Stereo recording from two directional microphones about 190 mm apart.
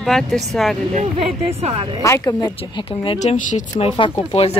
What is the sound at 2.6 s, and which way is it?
Speech, 30° left (ahead or behind).